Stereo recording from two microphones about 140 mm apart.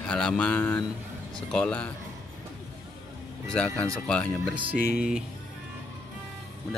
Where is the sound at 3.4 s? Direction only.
10° left (ahead or behind).